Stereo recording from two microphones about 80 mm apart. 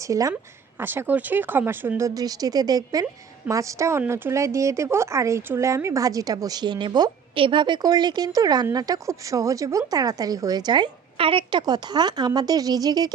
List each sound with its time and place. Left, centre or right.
0.0 s speech: right
0.8 s speech: right
2.0 s speech: right
3.5 s a woman's voice: right
11.3 s a woman's voice: right